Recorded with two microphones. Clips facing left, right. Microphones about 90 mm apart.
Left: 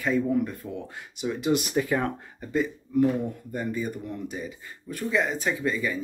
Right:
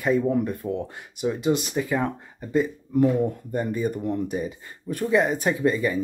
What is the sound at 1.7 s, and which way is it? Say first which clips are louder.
Speech: even; 5° right (ahead or behind).